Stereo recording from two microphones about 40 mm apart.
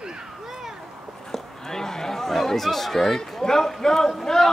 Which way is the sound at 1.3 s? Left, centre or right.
Centre.